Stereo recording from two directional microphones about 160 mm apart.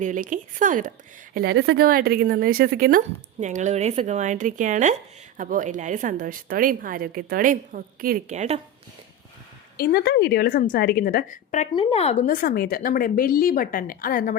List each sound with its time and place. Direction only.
0.0 s speech: 55° right (ahead or behind)
3.4 s speech: 50° right (ahead or behind)
8.3 s speech: 45° right (ahead or behind)
9.7 s a woman's voice: 75° left (ahead or behind); by 11.7 s 55° left (ahead or behind)
11.7 s speech: 35° left (ahead or behind)
12.2 s a woman's voice: 60° left (ahead or behind)